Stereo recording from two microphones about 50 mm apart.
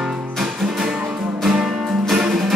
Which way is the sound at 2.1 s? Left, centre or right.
Centre.